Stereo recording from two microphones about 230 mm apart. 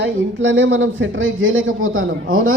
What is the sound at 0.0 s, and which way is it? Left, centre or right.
Speech, right.